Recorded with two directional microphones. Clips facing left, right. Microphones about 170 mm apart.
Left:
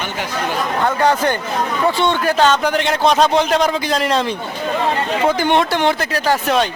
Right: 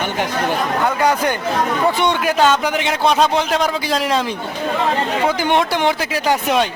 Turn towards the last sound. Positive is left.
turn(degrees=-10)  # may be behind; listen again after turning